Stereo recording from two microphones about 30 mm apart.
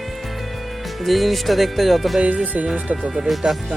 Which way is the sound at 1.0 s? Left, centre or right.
Centre.